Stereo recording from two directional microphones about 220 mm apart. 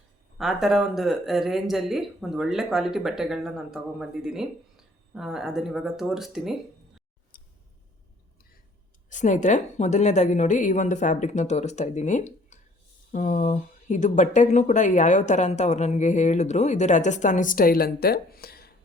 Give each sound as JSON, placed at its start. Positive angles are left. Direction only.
{"t": 0.3, "sound": "speech", "side_deg": 0}
{"t": 7.3, "sound": "scissors", "side_deg": 40}
{"t": 9.0, "sound": "speech", "side_deg": 35}